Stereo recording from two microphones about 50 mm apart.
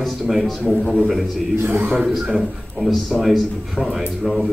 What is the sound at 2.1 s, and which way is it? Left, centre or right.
Speech, centre.